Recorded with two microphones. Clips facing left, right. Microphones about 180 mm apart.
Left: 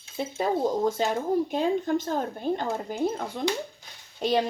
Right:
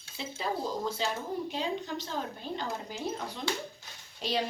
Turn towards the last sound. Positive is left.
turn(degrees=50)  # may be behind; listen again after turning